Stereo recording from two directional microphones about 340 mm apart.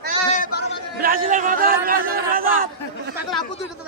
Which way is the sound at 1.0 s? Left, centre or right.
Right.